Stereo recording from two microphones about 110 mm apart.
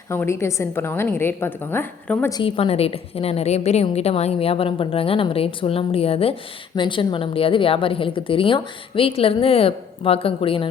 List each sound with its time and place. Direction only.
0.1 s a woman's voice: 25° left (ahead or behind)
2.4 s a woman's voice: 65° left (ahead or behind)
6.7 s a woman's voice: 45° left (ahead or behind)